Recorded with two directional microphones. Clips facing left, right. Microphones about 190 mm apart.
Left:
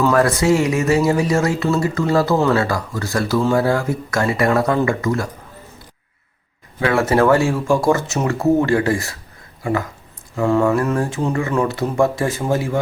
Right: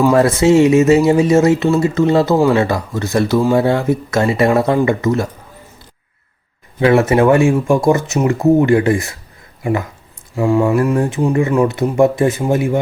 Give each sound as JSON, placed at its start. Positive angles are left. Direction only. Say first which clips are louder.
{"t": 0.1, "sound": "speech", "louder": "right 4 dB", "side_deg": -25}
{"t": 6.7, "sound": "speech", "louder": "right 4 dB", "side_deg": -20}
{"t": 10.3, "sound": "speech", "louder": "right 2 dB", "side_deg": -10}